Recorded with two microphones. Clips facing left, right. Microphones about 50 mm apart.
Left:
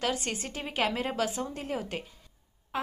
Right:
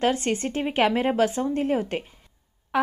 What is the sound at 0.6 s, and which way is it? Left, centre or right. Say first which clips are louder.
A woman's voice: right 7 dB; right.